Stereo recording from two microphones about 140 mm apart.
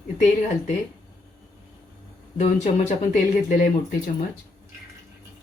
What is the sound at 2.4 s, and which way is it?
Speech, 55° left (ahead or behind).